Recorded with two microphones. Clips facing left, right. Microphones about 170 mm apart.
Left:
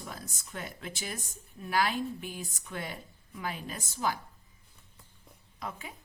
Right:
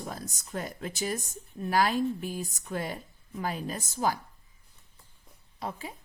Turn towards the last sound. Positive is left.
turn(degrees=-35)  # may be behind; listen again after turning